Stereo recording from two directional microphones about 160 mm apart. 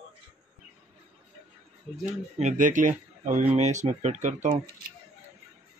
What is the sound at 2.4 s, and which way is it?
Speech, 50° right (ahead or behind).